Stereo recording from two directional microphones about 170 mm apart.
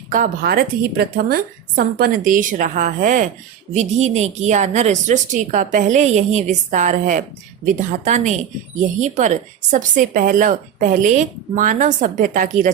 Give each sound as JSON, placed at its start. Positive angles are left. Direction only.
{"t": 0.1, "sound": "speech", "side_deg": -55}